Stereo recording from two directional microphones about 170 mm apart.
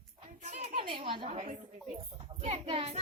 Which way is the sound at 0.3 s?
40° right (ahead or behind).